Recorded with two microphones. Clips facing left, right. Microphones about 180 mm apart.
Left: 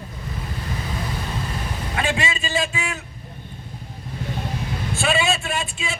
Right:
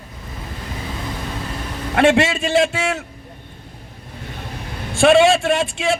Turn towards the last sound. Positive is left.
turn(degrees=-80)